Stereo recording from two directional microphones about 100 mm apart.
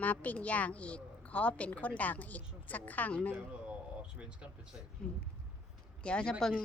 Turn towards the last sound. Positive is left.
turn(degrees=5)  # may be behind; listen again after turning